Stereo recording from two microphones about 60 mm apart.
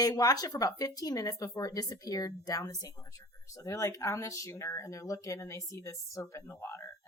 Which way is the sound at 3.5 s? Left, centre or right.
Left.